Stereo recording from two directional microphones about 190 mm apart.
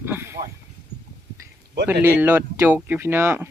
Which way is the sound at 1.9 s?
10° right (ahead or behind).